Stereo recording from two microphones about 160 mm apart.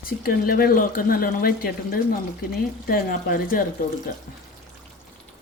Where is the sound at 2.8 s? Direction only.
60° left (ahead or behind).